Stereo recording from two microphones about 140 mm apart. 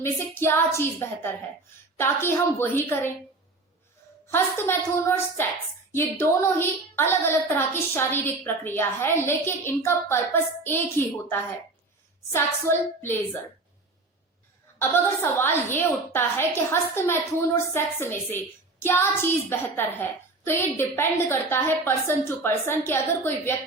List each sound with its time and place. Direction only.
0.0 s a woman's voice: 15° left (ahead or behind)
4.3 s a woman's voice: 15° left (ahead or behind)
14.8 s a woman's voice: 15° left (ahead or behind)